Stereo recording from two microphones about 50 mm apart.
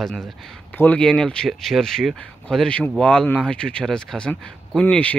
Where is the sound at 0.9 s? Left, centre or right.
Centre.